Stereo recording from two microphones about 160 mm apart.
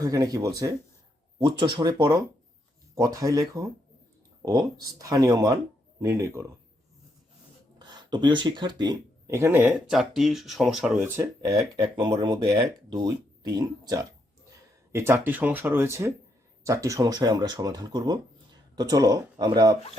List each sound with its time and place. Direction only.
0.0 s speech: 20° right (ahead or behind)
7.8 s speech: 25° right (ahead or behind)